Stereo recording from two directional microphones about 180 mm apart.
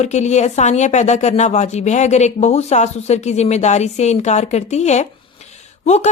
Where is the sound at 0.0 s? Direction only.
40° left (ahead or behind).